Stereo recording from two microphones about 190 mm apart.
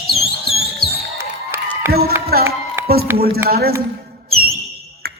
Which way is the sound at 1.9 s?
55° right (ahead or behind).